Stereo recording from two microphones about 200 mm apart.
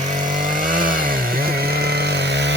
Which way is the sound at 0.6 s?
45° right (ahead or behind).